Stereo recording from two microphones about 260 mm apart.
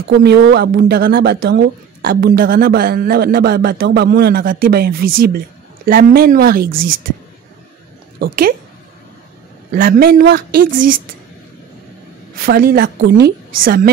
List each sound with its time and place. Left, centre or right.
0.2 s speech: right
8.2 s speech: right
9.7 s speech: right
12.4 s speech: right